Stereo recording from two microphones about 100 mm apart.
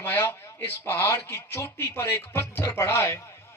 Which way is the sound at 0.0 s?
20° left (ahead or behind).